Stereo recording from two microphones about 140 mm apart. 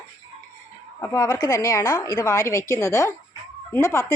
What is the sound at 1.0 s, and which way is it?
A woman's voice, 25° left (ahead or behind).